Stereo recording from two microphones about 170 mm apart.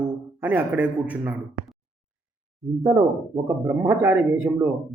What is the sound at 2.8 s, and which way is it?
Speech, 20° right (ahead or behind).